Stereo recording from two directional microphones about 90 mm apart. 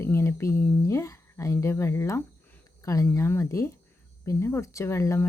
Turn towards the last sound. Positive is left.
turn(degrees=30)  # may be behind; listen again after turning